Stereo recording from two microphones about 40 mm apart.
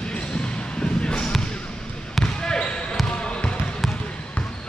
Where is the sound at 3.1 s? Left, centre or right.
Left.